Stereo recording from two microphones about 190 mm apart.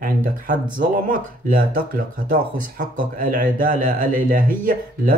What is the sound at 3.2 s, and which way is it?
Speech, 45° right (ahead or behind).